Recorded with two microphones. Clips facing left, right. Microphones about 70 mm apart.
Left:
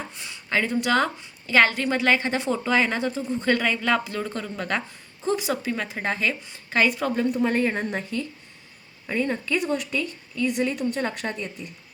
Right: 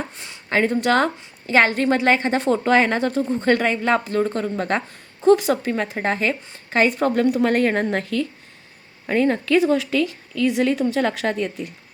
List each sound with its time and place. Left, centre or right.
0.2 s a woman's voice: right
2.4 s speech: right
5.2 s speech: right
7.2 s a woman's voice: right
9.0 s a woman's voice: right